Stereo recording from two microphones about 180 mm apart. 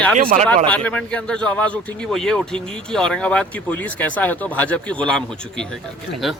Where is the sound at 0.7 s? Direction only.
5° left (ahead or behind).